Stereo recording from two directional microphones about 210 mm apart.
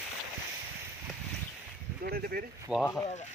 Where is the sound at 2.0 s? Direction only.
45° right (ahead or behind).